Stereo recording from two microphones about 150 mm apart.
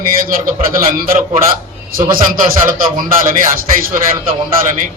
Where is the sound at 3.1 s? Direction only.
65° right (ahead or behind).